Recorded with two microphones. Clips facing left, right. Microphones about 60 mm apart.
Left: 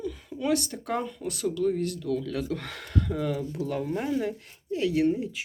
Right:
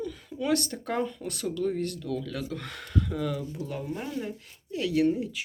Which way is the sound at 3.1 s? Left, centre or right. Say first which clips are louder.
Left 2 dB; left.